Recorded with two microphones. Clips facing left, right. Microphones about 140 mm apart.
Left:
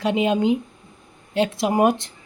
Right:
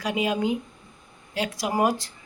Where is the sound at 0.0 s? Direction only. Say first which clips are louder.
Left 5 dB; 25° left (ahead or behind).